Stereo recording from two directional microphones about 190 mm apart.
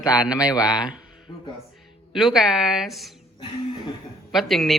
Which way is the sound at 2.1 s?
Centre (ahead or behind).